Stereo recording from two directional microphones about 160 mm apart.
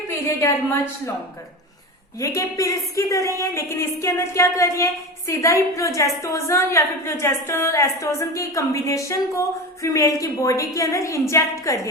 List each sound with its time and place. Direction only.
0.1 s a woman's voice: 20° left (ahead or behind)
2.2 s a woman's voice: 20° left (ahead or behind)